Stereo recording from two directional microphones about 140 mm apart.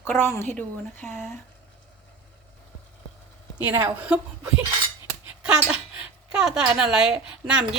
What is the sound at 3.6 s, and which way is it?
Speech, 15° right (ahead or behind).